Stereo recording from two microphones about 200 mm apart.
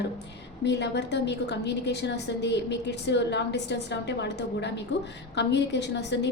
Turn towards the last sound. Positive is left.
turn(degrees=60)  # may be behind; listen again after turning